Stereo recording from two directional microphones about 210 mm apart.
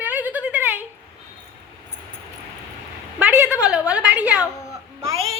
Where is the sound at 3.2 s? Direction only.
5° right (ahead or behind).